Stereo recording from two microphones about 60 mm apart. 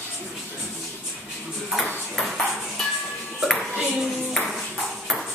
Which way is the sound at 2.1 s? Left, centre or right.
Centre.